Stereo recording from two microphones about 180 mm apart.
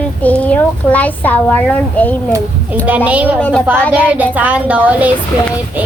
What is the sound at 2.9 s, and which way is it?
Speech, 10° right (ahead or behind).